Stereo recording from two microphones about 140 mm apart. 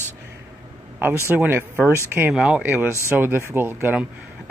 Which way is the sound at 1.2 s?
15° right (ahead or behind).